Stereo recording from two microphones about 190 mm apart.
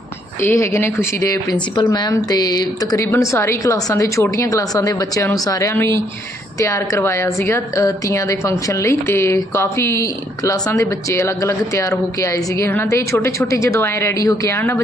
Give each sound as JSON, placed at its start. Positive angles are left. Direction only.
{"t": 0.4, "sound": "a woman's voice", "side_deg": 15}